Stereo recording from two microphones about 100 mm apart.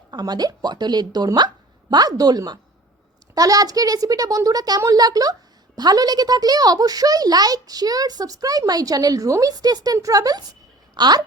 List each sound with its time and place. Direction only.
0.1 s a child's voice: 40° right (ahead or behind)